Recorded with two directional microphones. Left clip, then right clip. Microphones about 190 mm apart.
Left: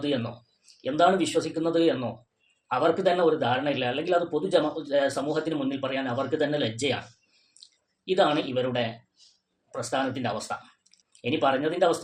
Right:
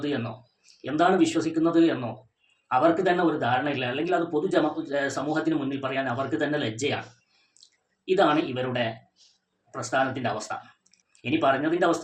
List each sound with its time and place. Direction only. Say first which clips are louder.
0.8 s a man's voice: even; 50° left (ahead or behind)
8.0 s a man's voice: right 1 dB; 50° left (ahead or behind)
9.9 s a man's voice: right 3 dB; 50° left (ahead or behind)